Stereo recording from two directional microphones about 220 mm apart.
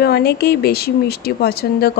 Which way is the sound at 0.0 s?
45° left (ahead or behind).